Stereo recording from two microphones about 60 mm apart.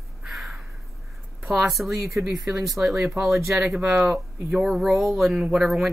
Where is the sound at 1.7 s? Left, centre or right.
Centre.